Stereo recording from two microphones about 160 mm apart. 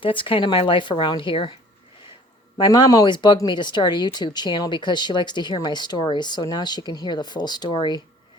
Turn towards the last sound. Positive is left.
turn(degrees=30)  # may be behind; listen again after turning